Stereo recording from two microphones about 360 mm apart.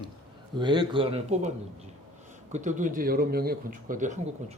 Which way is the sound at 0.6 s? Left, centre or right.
Centre.